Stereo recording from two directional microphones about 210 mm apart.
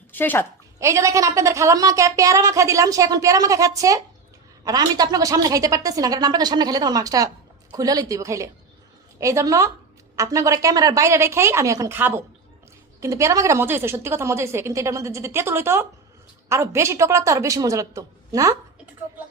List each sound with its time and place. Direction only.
0.1 s a woman's voice: 10° left (ahead or behind)
0.8 s a woman's voice: 15° right (ahead or behind)